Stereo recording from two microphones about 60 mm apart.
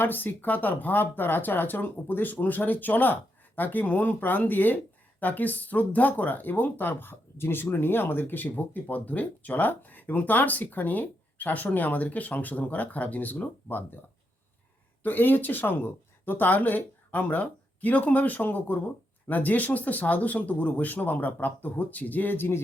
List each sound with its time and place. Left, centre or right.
0.0 s speech: left
15.0 s speech: left